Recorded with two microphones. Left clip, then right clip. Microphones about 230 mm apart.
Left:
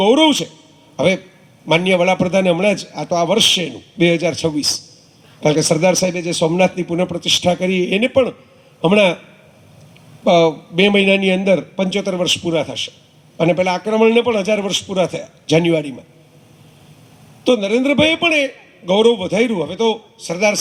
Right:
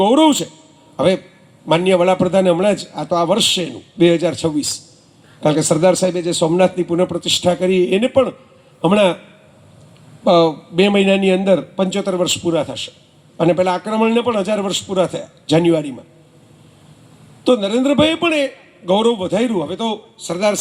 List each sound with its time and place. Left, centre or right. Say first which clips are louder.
0.0 s a man's voice: even; left
10.2 s a man's voice: even; left
17.4 s a man's voice: even; left